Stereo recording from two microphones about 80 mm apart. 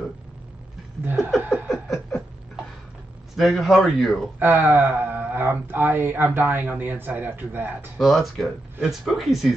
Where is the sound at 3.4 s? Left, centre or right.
Centre.